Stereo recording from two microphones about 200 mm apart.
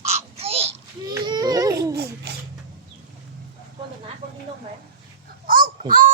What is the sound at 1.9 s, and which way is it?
Babbling, 50° right (ahead or behind).